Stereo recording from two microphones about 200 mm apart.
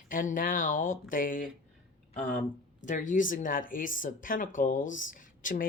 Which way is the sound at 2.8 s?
40° left (ahead or behind).